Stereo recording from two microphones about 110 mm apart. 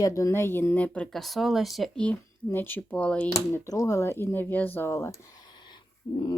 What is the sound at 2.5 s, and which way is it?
Speech, 20° left (ahead or behind).